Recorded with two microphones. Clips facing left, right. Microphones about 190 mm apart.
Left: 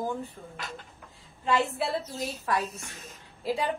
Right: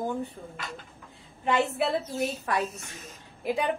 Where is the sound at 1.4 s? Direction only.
20° right (ahead or behind).